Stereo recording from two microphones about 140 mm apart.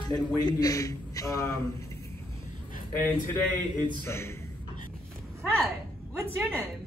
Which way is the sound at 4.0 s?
20° left (ahead or behind).